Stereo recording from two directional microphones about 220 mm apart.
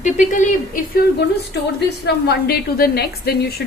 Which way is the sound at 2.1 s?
45° left (ahead or behind).